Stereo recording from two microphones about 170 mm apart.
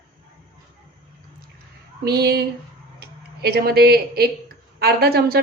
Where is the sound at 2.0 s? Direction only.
70° right (ahead or behind).